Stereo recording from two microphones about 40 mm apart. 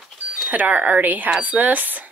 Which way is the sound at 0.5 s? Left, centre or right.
Right.